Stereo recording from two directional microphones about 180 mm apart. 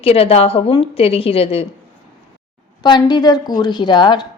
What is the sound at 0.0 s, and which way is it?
A woman's voice, 35° left (ahead or behind).